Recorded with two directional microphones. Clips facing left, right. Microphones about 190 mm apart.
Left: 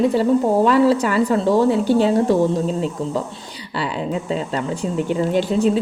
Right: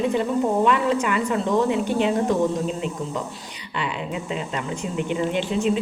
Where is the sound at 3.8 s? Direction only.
35° left (ahead or behind).